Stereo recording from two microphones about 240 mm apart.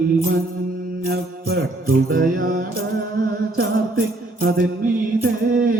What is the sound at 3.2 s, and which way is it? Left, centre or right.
Mantra, right.